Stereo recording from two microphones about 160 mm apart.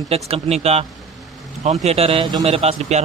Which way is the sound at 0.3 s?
40° right (ahead or behind).